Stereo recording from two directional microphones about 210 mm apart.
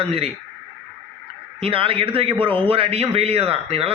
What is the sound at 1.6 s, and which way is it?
A man's voice, 25° right (ahead or behind).